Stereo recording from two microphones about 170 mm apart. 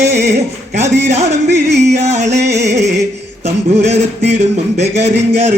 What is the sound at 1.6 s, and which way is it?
Music, 80° right.